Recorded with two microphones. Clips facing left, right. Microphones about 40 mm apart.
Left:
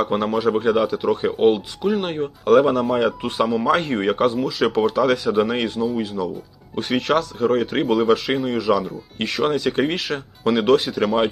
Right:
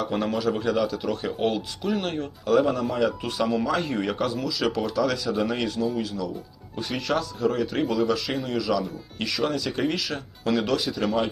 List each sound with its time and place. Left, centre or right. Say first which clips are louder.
0.0 s speech: left 6 dB; left
2.5 s speech: left 6 dB; left
6.7 s speech: left 7 dB; left